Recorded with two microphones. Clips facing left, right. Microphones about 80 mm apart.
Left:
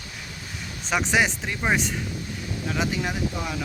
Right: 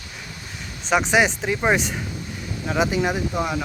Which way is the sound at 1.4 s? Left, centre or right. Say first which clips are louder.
Right 4 dB; centre.